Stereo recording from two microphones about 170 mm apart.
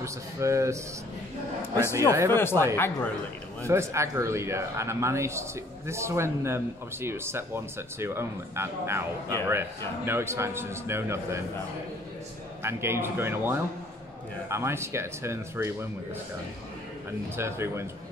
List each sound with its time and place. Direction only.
0.0 s a man's voice: 15° right (ahead or behind)
2.0 s a man's voice: 20° right (ahead or behind)
2.6 s speech: 15° left (ahead or behind)
3.6 s a man's voice: 15° right (ahead or behind)
12.6 s a man's voice: 15° right (ahead or behind)
17.4 s a man's voice: 15° right (ahead or behind)